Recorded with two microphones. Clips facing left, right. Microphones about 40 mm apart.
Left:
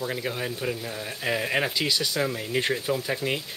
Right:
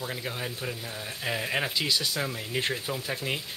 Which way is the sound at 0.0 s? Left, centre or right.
Centre.